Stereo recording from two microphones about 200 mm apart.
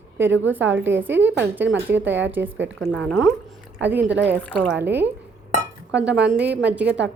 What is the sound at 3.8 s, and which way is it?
Speech, 10° right (ahead or behind).